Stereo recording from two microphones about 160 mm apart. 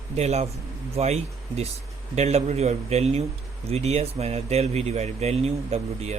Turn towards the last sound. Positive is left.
turn(degrees=-40)  # may be behind; listen again after turning